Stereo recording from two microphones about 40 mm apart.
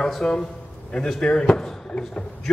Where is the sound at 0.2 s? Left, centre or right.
Left.